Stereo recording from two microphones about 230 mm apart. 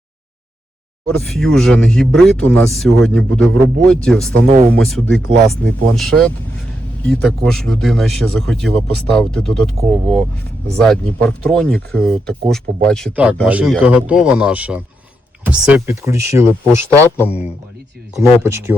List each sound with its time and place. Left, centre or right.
1.2 s speech: centre